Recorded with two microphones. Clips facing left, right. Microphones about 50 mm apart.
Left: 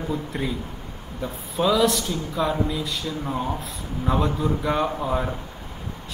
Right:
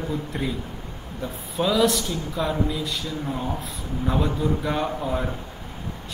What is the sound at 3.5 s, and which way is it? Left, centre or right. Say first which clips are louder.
Speech: even; centre.